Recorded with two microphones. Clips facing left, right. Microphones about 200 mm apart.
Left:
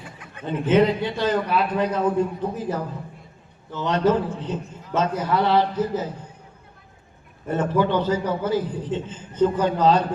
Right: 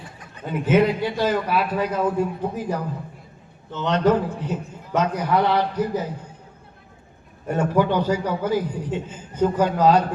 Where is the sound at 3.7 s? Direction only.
20° right (ahead or behind).